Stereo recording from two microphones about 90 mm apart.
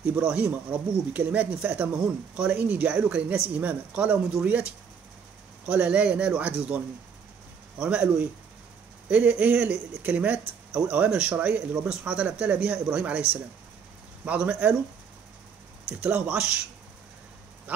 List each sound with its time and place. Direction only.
0.2 s speech: 15° right (ahead or behind)
5.7 s speech: 15° right (ahead or behind)
7.8 s speech: 15° right (ahead or behind)
14.2 s speech: 15° right (ahead or behind)
15.9 s speech: 20° right (ahead or behind)
17.7 s a sound: 15° right (ahead or behind)